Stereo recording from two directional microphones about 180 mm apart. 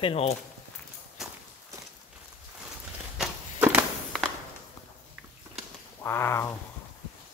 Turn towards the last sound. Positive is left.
turn(degrees=15)  # may be behind; listen again after turning